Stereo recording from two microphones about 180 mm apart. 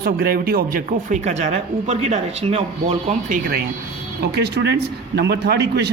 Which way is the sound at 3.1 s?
45° right (ahead or behind).